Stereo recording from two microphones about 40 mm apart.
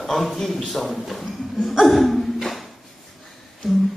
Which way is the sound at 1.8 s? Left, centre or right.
Centre.